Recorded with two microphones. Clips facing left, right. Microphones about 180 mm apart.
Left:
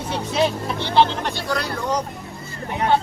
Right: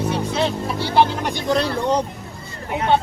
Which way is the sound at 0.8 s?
10° right (ahead or behind).